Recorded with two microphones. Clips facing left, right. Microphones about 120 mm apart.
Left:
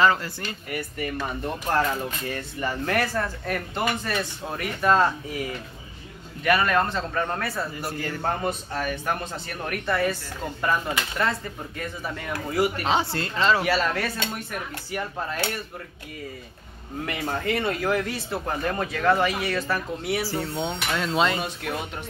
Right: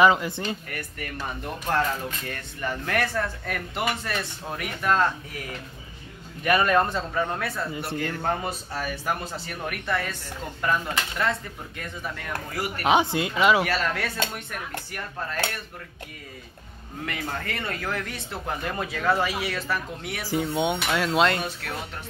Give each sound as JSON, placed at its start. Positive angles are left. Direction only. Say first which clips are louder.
{"t": 0.0, "sound": "a man's voice", "louder": "right 2 dB", "side_deg": -15}
{"t": 0.7, "sound": "speech", "louder": "left 6 dB", "side_deg": 10}
{"t": 6.4, "sound": "a man's voice", "louder": "right 1 dB", "side_deg": -20}
{"t": 12.8, "sound": "a man's voice", "louder": "right 3 dB", "side_deg": -15}
{"t": 13.7, "sound": "speech", "louder": "left 3 dB", "side_deg": 5}
{"t": 17.0, "sound": "speech", "louder": "left 4 dB", "side_deg": 10}
{"t": 18.6, "sound": "speech", "louder": "left 4 dB", "side_deg": -5}
{"t": 20.2, "sound": "a man's voice", "louder": "right 3 dB", "side_deg": -15}
{"t": 21.0, "sound": "speech", "louder": "even", "side_deg": 0}